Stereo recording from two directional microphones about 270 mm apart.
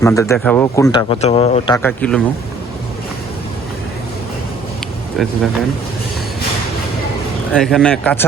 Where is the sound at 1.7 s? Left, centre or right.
Centre.